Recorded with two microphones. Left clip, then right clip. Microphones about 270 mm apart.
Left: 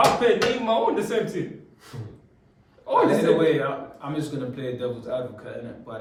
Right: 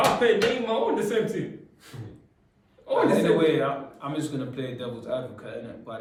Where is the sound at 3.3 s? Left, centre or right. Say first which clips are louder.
Left 1 dB; centre.